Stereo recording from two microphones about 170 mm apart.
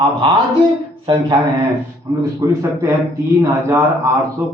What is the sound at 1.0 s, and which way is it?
A man's voice, 20° right (ahead or behind).